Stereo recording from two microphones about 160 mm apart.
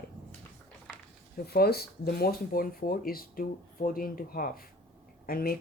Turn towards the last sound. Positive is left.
turn(degrees=65)  # may be behind; listen again after turning